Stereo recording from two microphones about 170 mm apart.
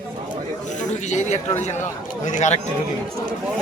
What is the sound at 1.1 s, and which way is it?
Speech, 45° left (ahead or behind).